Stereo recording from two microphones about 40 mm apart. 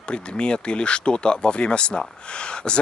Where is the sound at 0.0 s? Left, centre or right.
Left.